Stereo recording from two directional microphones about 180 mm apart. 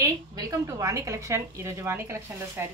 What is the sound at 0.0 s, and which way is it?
A woman's voice, 20° right (ahead or behind).